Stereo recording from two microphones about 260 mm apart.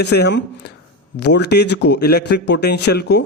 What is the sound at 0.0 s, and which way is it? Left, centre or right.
A man's voice, left.